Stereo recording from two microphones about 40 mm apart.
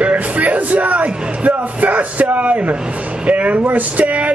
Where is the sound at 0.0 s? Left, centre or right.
Right.